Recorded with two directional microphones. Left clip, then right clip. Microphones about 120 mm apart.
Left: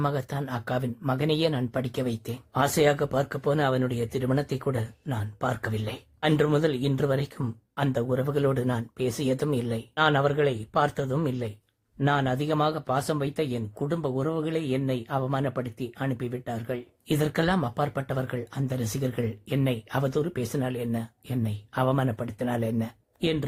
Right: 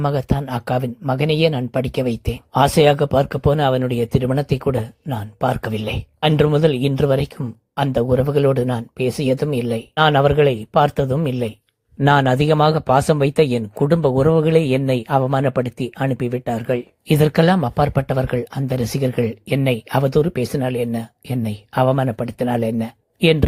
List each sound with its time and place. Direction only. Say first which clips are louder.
0.0 s speech: right 8 dB; 30° right (ahead or behind)
9.9 s speech: right 9 dB; 45° right (ahead or behind)
12.0 s speech: right 11 dB; 65° right (ahead or behind)